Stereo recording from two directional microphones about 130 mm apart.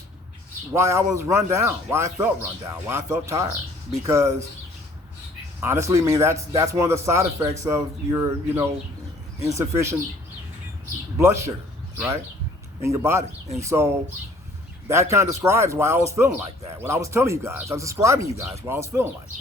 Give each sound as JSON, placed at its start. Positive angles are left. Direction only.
{"t": 0.7, "sound": "speech", "side_deg": -20}
{"t": 5.5, "sound": "speech", "side_deg": -20}
{"t": 11.2, "sound": "speech", "side_deg": -20}
{"t": 12.8, "sound": "speech", "side_deg": -20}